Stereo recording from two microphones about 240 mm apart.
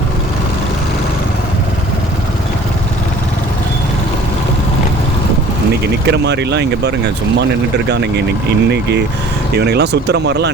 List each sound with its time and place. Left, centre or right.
6.1 s speech: right
8.7 s speech: right